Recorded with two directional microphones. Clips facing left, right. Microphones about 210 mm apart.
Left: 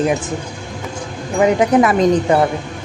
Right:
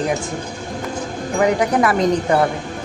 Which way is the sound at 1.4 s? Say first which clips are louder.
Left 4 dB; 20° left (ahead or behind).